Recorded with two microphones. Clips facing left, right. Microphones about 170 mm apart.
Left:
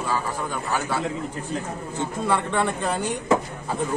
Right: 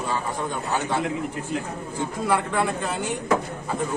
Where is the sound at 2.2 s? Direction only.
5° right (ahead or behind).